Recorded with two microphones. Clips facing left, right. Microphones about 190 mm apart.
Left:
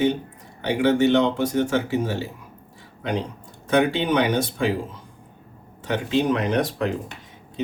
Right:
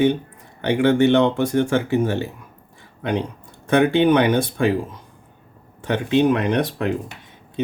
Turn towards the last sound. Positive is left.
turn(degrees=-60)  # may be behind; listen again after turning